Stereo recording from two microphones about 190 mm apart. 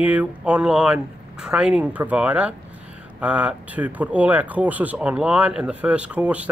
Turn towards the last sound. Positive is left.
turn(degrees=-5)  # may be behind; listen again after turning